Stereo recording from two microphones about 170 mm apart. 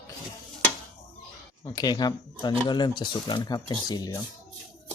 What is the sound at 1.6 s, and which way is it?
Speech, 20° left (ahead or behind).